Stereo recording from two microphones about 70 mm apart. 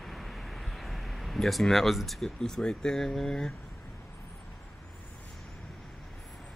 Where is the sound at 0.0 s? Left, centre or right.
Centre.